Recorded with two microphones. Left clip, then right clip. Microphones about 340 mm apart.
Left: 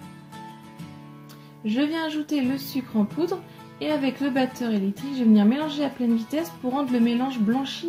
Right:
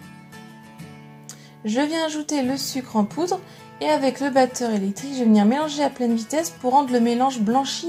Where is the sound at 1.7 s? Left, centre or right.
Centre.